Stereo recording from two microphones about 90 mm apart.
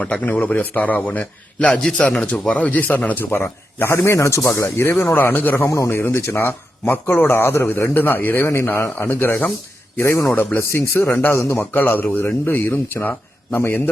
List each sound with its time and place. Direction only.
0.0 s a man's voice: 15° left (ahead or behind); by 4.9 s 35° left (ahead or behind)
5.1 s speech: 20° left (ahead or behind)
5.6 s a man's voice: 35° left (ahead or behind)
11.7 s speech: 20° left (ahead or behind)